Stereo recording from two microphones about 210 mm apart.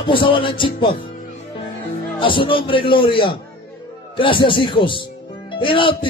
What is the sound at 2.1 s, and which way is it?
Speech, 25° left (ahead or behind).